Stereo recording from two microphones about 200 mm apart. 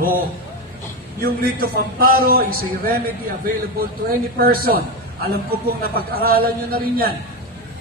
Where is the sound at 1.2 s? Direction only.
50° right (ahead or behind).